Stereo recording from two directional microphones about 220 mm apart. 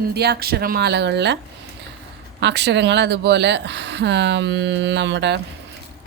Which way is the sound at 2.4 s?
50° right (ahead or behind).